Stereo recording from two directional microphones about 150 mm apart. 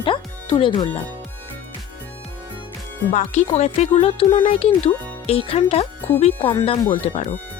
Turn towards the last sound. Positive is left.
turn(degrees=45)  # may be behind; listen again after turning